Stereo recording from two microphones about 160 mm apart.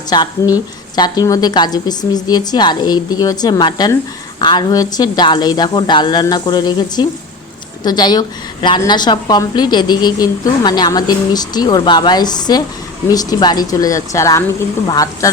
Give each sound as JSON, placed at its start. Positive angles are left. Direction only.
{"t": 0.1, "sound": "a woman's voice", "side_deg": 25}